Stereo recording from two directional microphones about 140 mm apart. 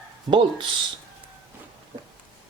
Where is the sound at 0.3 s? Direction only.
40° right (ahead or behind).